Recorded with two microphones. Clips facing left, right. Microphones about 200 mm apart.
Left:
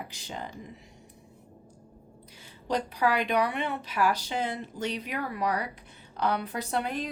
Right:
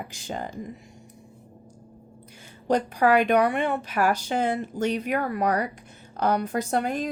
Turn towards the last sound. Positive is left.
turn(degrees=-45)  # may be behind; listen again after turning